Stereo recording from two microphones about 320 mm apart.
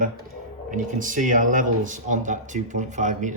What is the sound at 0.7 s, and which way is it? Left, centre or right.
Speech, right.